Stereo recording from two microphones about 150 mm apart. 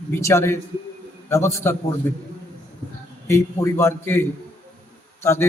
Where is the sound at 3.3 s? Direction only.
15° left (ahead or behind).